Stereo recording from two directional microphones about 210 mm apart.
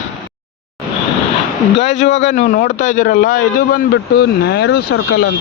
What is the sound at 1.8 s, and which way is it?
Speech, 60° left (ahead or behind).